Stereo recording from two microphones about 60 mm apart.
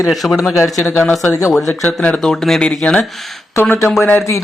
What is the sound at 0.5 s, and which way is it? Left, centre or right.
Speech, left.